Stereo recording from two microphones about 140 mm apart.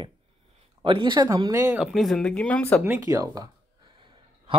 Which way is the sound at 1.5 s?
20° right (ahead or behind).